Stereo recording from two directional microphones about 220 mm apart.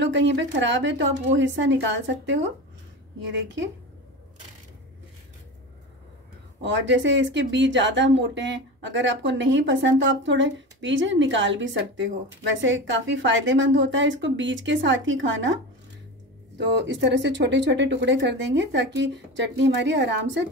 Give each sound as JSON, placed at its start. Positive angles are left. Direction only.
{"t": 0.0, "sound": "speech", "side_deg": -55}
{"t": 6.6, "sound": "speech", "side_deg": -55}